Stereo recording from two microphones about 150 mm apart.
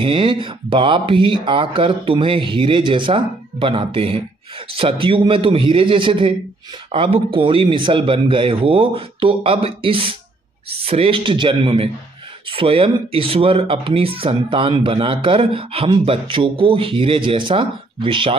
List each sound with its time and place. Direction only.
0.0 s speech: 35° right (ahead or behind)